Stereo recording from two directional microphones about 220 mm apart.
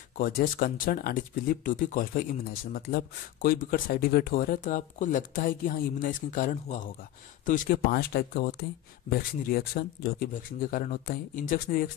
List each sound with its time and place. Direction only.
0.2 s speech: 40° left (ahead or behind)